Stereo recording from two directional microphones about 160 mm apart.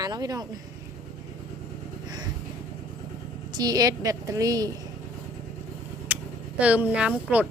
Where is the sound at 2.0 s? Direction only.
25° right (ahead or behind).